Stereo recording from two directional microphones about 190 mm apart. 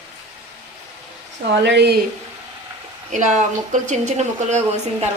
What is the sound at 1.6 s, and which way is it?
Speech, 60° right (ahead or behind).